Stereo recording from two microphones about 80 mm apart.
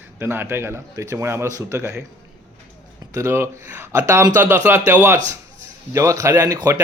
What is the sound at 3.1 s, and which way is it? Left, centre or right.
A man's voice, right.